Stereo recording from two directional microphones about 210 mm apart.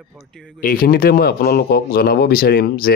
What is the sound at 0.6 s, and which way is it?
Speech, 40° left (ahead or behind).